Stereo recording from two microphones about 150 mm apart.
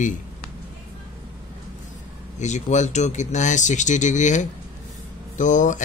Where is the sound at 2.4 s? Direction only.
50° left (ahead or behind).